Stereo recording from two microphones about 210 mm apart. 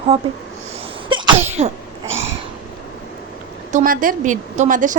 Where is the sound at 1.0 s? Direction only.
25° right (ahead or behind).